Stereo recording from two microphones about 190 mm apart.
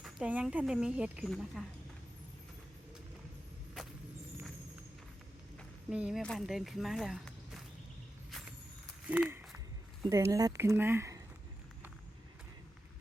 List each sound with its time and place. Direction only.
0.0 s speech: 5° right (ahead or behind)
5.9 s speech: 5° right (ahead or behind)
9.0 s owl: 10° right (ahead or behind)
10.1 s speech: 15° right (ahead or behind)